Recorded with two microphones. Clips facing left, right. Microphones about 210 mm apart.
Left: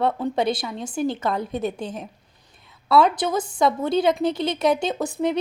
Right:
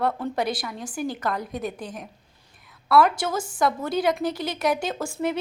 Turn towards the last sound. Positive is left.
turn(degrees=20)  # may be behind; listen again after turning